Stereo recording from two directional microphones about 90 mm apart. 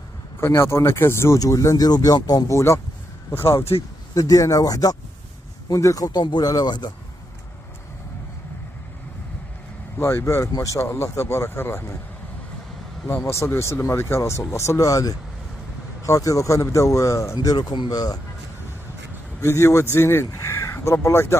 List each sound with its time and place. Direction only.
0.6 s speech: 30° left (ahead or behind); by 2.5 s 45° left (ahead or behind)
2.5 s a man's voice: 30° left (ahead or behind)
4.1 s a man's voice: 40° left (ahead or behind)
9.9 s a man's voice: 30° left (ahead or behind)
13.0 s a man's voice: 30° left (ahead or behind); by 18.2 s 45° left (ahead or behind)
19.4 s speech: 30° left (ahead or behind)